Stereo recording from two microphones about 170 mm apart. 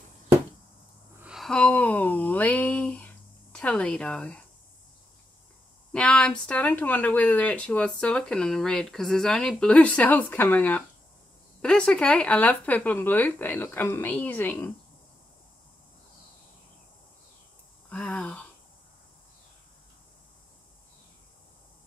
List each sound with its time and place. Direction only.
1.2 s a sound: centre (ahead or behind)
3.5 s speech: 5° left (ahead or behind)
5.9 s speech: 5° left (ahead or behind)
17.8 s speech: 5° left (ahead or behind)